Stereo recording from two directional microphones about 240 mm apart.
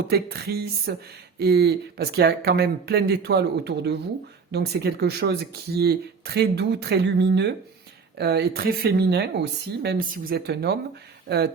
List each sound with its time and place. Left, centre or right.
0.1 s speech: right